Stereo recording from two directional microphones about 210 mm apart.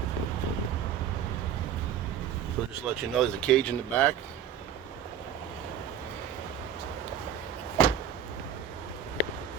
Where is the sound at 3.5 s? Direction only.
5° left (ahead or behind).